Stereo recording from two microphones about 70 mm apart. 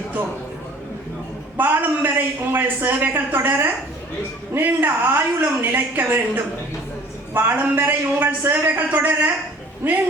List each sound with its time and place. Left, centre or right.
1.5 s a man's voice: right